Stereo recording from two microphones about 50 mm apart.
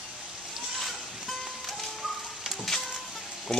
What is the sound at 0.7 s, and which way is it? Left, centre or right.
Boat, centre.